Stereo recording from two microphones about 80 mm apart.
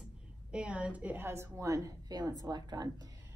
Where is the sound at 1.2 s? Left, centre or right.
Right.